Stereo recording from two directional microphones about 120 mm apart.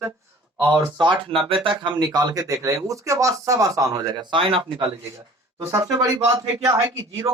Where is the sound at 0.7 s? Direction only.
40° right (ahead or behind).